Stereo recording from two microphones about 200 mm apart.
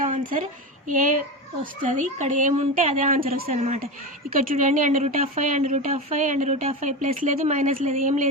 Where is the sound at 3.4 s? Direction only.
30° right (ahead or behind).